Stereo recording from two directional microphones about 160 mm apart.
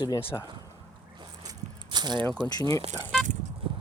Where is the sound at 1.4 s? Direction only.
25° right (ahead or behind).